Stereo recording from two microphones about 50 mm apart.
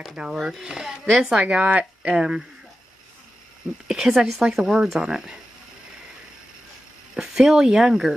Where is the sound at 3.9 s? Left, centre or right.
Centre.